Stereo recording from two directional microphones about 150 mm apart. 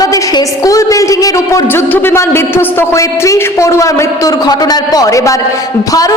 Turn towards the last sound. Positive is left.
turn(degrees=25)  # may be behind; listen again after turning